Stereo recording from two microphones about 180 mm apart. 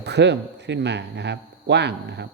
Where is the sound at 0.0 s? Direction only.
70° right (ahead or behind).